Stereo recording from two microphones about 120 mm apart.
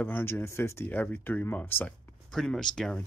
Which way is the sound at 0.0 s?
20° left (ahead or behind).